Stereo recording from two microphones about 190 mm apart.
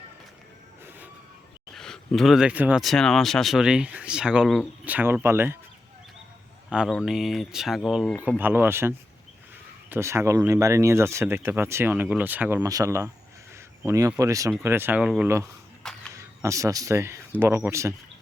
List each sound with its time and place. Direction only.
1.7 s speech: centre (ahead or behind)
6.7 s speech: 5° right (ahead or behind)